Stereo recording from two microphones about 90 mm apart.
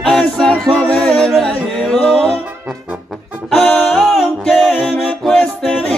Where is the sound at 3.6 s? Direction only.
10° left (ahead or behind).